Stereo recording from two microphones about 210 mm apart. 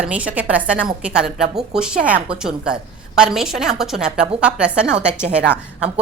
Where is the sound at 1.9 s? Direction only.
40° right (ahead or behind).